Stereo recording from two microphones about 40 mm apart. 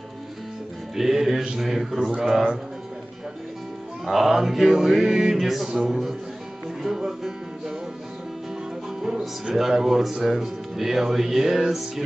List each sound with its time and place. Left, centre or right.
0.9 s music: centre
1.6 s speech: centre
4.0 s speech: centre
6.8 s music: centre
9.5 s speech: centre